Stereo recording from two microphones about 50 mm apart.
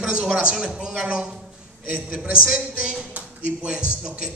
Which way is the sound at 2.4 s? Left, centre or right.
Right.